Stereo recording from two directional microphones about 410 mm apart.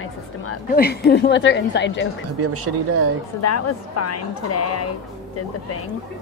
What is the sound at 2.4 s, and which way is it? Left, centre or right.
Speech, right.